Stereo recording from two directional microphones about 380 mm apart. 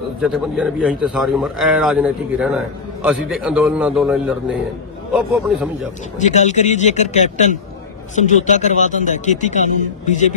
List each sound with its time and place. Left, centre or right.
0.2 s a man's voice: centre
6.1 s speech: centre